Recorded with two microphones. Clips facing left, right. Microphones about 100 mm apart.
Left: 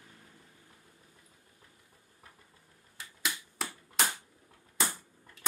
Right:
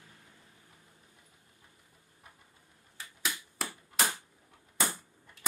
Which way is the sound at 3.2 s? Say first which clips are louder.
Even; centre (ahead or behind).